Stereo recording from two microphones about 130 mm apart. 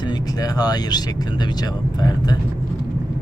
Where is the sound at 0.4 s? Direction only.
30° left (ahead or behind).